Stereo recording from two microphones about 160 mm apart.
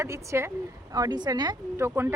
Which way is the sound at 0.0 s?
20° right (ahead or behind).